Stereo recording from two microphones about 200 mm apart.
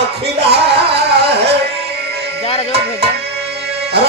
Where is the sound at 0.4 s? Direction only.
55° right (ahead or behind).